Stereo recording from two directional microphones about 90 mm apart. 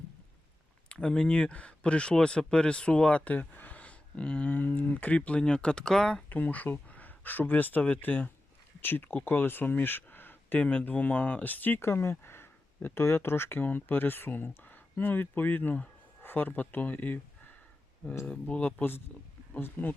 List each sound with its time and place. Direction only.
0.9 s speech: 10° left (ahead or behind)
6.2 s speech: 20° left (ahead or behind)
18.3 s speech: 15° left (ahead or behind)